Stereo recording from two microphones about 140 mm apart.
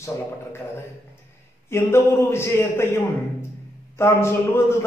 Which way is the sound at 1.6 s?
20° left (ahead or behind).